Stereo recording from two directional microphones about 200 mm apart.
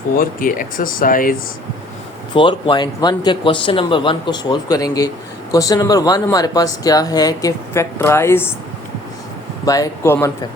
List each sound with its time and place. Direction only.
0.2 s speech: 45° left (ahead or behind)
2.3 s speech: 25° left (ahead or behind)
9.6 s speech: 15° left (ahead or behind)